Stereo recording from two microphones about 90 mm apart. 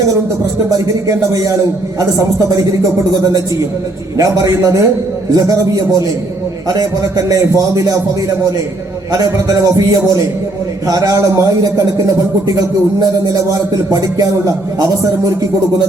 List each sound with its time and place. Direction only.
0.7 s a man's voice: 40° right (ahead or behind)
4.2 s a man's voice: 45° right (ahead or behind)
9.1 s a man's voice: 40° right (ahead or behind)